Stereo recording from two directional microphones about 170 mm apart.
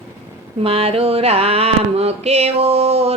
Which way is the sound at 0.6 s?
35° right (ahead or behind).